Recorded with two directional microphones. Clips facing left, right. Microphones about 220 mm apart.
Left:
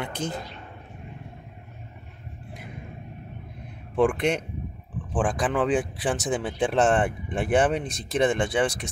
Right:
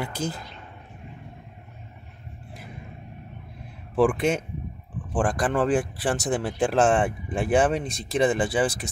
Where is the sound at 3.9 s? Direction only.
Centre (ahead or behind).